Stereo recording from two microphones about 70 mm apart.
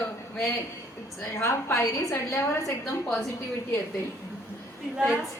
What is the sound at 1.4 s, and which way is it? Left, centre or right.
Speech, left.